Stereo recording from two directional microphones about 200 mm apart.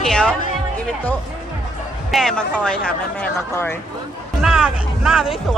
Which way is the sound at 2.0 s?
Centre (ahead or behind).